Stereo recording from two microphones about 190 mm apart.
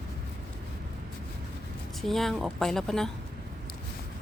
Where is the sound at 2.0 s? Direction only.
Centre (ahead or behind).